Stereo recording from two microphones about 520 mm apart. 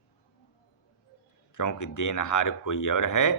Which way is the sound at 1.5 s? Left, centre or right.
Left.